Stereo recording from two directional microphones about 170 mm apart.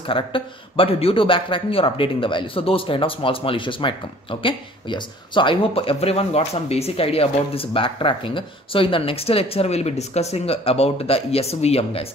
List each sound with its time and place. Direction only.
0.0 s speech: 30° left (ahead or behind)